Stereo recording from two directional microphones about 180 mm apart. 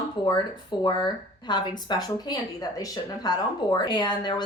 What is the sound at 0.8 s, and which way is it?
Speech, 25° left (ahead or behind).